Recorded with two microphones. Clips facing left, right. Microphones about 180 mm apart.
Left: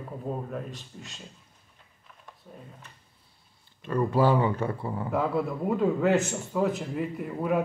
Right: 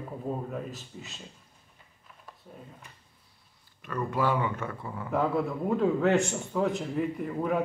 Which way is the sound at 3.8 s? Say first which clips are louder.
Left 5 dB; 30° left (ahead or behind).